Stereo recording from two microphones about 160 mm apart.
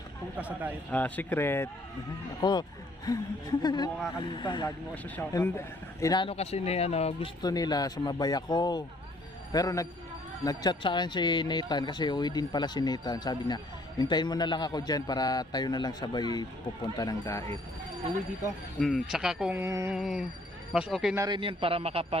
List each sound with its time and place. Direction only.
0.3 s music: 10° right (ahead or behind)
0.9 s speech: 10° left (ahead or behind)
2.4 s a man's voice: 25° left (ahead or behind)
5.3 s a man's voice: 20° left (ahead or behind)
6.2 s speech: 40° left (ahead or behind)
7.4 s a man's voice: 25° left (ahead or behind)
18.8 s speech: centre (ahead or behind)
19.5 s music: 15° right (ahead or behind)
20.0 s speech: 5° right (ahead or behind)
21.2 s a man's voice: 30° right (ahead or behind)